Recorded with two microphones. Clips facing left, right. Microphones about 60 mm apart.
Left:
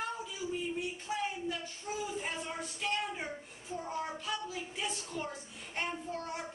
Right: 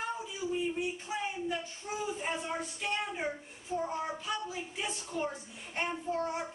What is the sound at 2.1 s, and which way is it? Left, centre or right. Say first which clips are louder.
A child's voice: right 3 dB; centre.